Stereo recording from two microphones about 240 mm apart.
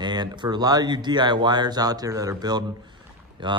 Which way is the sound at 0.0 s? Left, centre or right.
Centre.